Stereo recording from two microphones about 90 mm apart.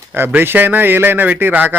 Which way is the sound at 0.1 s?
25° right (ahead or behind).